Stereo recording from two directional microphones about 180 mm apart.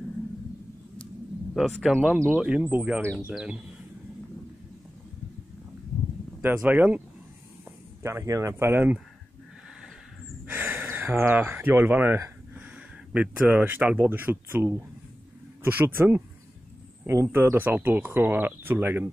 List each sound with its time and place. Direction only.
1.5 s speech: centre (ahead or behind)
6.4 s speech: 10° right (ahead or behind)
8.0 s speech: 15° right (ahead or behind)
10.4 s speech: 10° right (ahead or behind)